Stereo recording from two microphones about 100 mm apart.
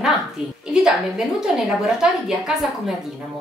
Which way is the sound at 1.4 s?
5° right (ahead or behind).